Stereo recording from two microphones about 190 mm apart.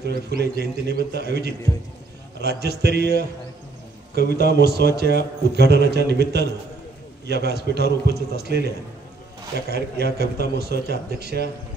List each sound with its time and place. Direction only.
0.0 s a man's voice: 60° right (ahead or behind)
4.4 s a man's voice: 60° right (ahead or behind)